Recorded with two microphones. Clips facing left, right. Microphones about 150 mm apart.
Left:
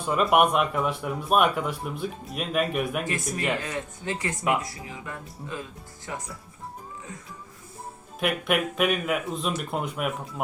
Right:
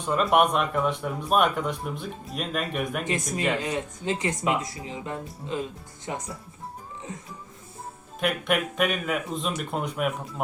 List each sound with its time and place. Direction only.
0.0 s speech: 5° left (ahead or behind)
3.0 s speech: 20° right (ahead or behind)
8.2 s speech: 5° left (ahead or behind)